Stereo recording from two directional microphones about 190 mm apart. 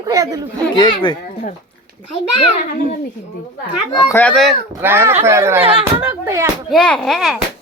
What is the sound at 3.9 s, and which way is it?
Speech, 25° left (ahead or behind).